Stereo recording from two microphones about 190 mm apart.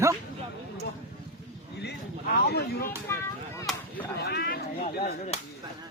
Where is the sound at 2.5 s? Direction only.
55° left (ahead or behind).